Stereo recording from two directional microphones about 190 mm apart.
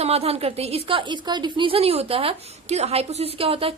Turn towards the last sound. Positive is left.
turn(degrees=-30)  # may be behind; listen again after turning